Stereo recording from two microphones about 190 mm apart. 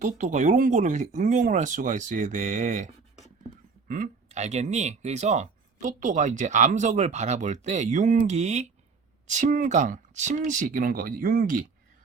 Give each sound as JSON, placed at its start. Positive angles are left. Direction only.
{"t": 0.0, "sound": "speech", "side_deg": -40}